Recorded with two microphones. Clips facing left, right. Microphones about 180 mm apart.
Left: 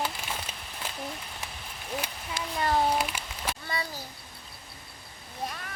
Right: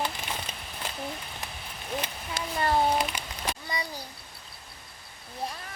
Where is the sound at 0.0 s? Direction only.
5° left (ahead or behind).